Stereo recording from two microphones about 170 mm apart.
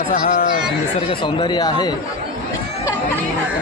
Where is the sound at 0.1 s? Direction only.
60° left (ahead or behind).